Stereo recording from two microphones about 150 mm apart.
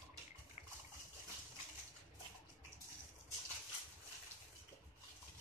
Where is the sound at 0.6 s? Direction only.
50° left (ahead or behind).